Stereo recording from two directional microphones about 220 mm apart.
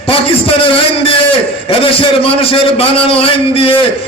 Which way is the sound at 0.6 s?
25° left (ahead or behind).